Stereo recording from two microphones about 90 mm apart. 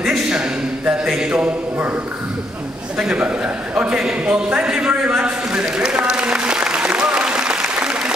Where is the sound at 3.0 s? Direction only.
15° right (ahead or behind).